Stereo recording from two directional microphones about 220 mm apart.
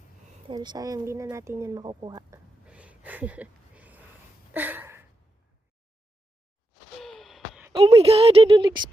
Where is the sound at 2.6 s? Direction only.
5° right (ahead or behind).